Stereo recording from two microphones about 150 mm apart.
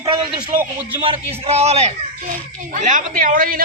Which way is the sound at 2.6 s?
60° right (ahead or behind).